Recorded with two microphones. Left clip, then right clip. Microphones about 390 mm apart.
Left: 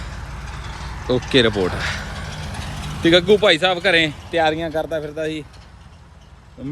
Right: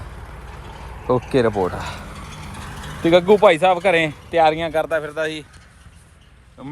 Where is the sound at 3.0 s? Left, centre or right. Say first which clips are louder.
Right 1 dB; centre.